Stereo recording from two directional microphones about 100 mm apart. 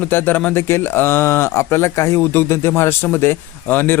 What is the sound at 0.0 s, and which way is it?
A man's voice, 20° left (ahead or behind).